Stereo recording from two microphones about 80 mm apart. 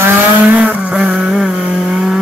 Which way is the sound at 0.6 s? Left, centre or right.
Centre.